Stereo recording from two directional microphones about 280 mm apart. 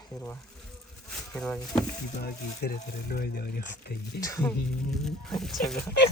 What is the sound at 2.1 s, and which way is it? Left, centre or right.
Speech, left.